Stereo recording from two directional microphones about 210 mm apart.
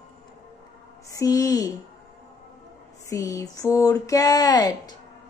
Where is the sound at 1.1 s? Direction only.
15° left (ahead or behind).